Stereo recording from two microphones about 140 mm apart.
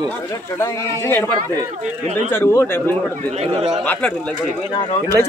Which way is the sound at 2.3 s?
15° left (ahead or behind).